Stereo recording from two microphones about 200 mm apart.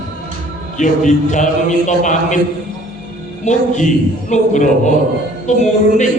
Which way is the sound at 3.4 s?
40° left (ahead or behind).